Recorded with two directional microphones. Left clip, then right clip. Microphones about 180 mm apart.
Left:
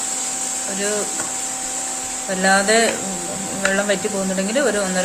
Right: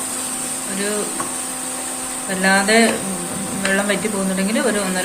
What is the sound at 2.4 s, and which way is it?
Speech, 40° left (ahead or behind).